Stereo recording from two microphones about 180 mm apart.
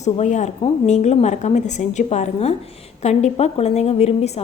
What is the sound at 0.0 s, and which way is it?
A woman's voice, 40° left (ahead or behind).